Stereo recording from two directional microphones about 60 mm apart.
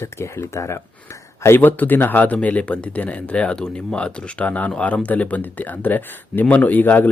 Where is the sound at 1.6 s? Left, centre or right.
Left.